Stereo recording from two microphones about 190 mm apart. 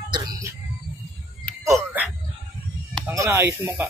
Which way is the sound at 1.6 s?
10° right (ahead or behind).